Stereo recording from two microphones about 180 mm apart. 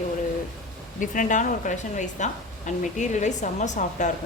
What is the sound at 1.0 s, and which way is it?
Speech, 45° left (ahead or behind).